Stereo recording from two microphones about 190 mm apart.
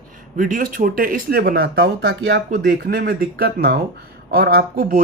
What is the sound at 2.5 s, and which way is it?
Speech, 50° right (ahead or behind).